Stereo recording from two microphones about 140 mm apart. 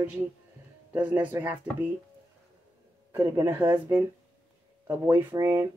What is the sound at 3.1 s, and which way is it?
Speech, 20° right (ahead or behind).